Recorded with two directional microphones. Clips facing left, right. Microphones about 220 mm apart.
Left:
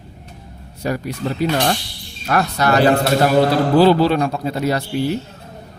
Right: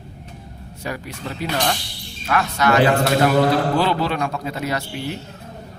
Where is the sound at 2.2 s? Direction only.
40° left (ahead or behind).